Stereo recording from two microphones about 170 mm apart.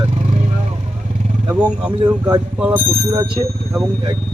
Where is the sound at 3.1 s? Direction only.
25° right (ahead or behind).